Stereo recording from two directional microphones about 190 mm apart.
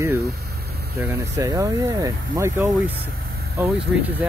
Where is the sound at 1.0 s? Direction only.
15° right (ahead or behind).